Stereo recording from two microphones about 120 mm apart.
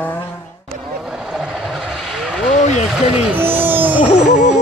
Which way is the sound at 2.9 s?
5° right (ahead or behind).